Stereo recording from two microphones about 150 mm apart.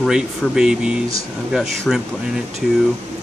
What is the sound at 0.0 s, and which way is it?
Speech, centre (ahead or behind).